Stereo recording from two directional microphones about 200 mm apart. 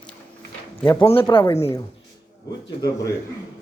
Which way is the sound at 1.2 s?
15° left (ahead or behind).